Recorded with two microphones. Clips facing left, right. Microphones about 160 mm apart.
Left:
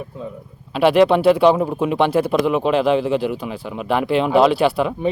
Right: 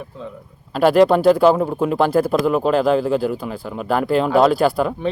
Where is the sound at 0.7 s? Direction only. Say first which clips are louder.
Right 1 dB; centre (ahead or behind).